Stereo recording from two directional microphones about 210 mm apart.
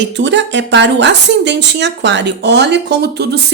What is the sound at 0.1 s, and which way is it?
Speech, 60° right (ahead or behind).